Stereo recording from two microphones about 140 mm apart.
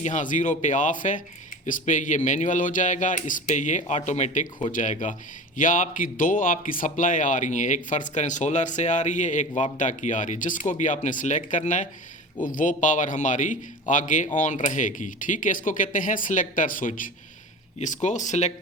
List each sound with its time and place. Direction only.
0.0 s speech: 65° left (ahead or behind)
17.7 s speech: 60° left (ahead or behind)